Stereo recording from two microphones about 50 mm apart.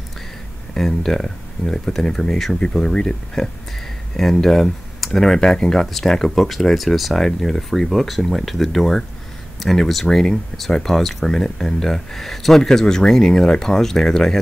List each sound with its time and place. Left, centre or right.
0.7 s speech: centre
4.2 s speech: centre